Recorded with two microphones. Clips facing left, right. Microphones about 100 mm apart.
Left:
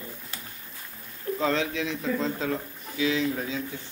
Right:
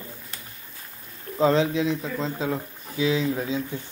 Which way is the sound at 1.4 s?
25° right (ahead or behind).